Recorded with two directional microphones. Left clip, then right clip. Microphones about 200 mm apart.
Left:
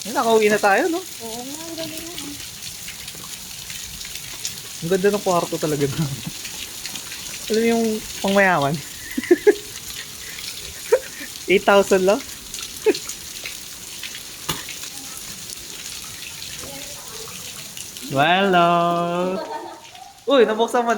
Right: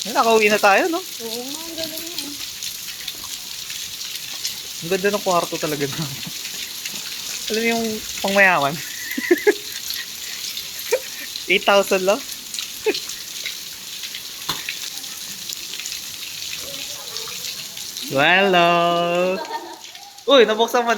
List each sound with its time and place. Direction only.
0.1 s speech: 10° right (ahead or behind)
4.9 s speech: centre (ahead or behind)
7.5 s frying: 10° left (ahead or behind)
9.1 s neigh: 5° left (ahead or behind)
10.9 s a sound: 20° left (ahead or behind)
11.4 s frying: 20° left (ahead or behind)
18.1 s speech: centre (ahead or behind)